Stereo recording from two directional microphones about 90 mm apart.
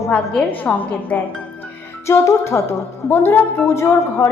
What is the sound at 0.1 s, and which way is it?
A woman's voice, 15° left (ahead or behind).